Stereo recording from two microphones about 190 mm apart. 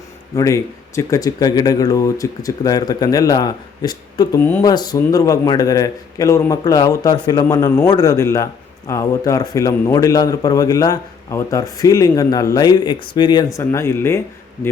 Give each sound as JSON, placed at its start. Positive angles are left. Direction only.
{"t": 0.3, "sound": "speech", "side_deg": 15}
{"t": 4.6, "sound": "a man's voice", "side_deg": 20}